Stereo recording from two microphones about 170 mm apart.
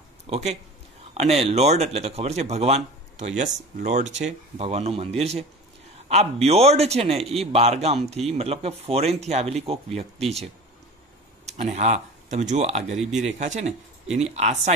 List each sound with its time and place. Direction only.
0.3 s a man's voice: 40° right (ahead or behind)
11.4 s a man's voice: 40° right (ahead or behind)